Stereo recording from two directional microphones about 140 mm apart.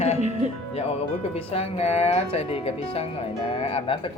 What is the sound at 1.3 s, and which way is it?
Speech, 45° left (ahead or behind).